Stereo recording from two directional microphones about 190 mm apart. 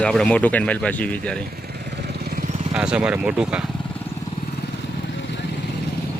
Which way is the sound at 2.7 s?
5° right (ahead or behind).